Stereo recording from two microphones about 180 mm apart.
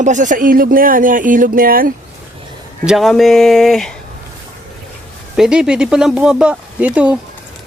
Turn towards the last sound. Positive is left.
turn(degrees=-5)  # may be behind; listen again after turning